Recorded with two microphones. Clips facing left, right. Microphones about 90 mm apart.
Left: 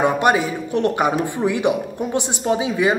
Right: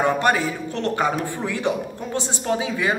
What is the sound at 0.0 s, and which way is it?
A woman's voice, 15° left (ahead or behind).